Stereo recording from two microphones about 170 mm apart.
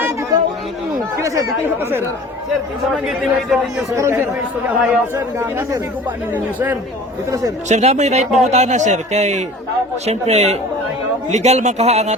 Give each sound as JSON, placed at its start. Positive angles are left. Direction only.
{"t": 1.1, "sound": "speech", "side_deg": -15}
{"t": 2.9, "sound": "a man's voice", "side_deg": 0}
{"t": 3.9, "sound": "speech", "side_deg": -15}
{"t": 7.7, "sound": "a man's voice", "side_deg": -40}